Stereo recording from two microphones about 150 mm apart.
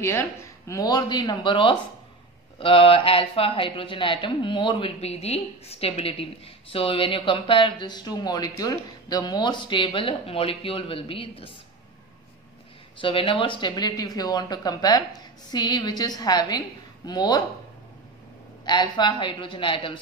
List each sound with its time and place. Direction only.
0.0 s speech: 20° left (ahead or behind); by 11.5 s 40° left (ahead or behind)
13.0 s speech: 35° left (ahead or behind)
18.7 s speech: 30° left (ahead or behind)